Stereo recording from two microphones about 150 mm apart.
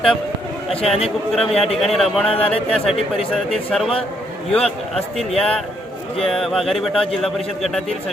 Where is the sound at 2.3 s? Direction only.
40° left (ahead or behind).